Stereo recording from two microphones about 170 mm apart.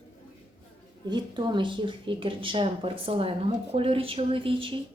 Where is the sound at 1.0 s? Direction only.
25° right (ahead or behind).